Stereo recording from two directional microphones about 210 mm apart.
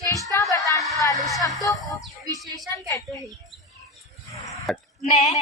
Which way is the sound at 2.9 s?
15° left (ahead or behind).